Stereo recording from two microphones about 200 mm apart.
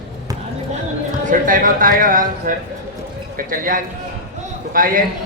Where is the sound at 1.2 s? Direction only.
45° right (ahead or behind).